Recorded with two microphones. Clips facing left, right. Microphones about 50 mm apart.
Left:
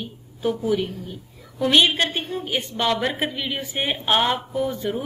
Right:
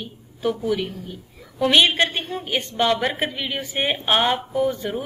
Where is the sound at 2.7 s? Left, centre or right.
Centre.